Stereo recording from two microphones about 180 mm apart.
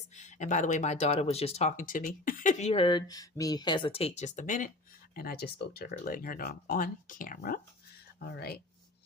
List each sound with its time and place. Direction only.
0.1 s speech: 40° left (ahead or behind)
5.1 s speech: 55° left (ahead or behind)